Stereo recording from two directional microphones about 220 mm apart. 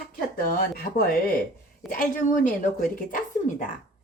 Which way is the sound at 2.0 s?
35° left (ahead or behind).